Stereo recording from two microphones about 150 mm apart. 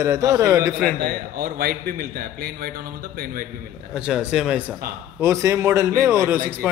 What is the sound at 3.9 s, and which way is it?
Speech, 5° right (ahead or behind).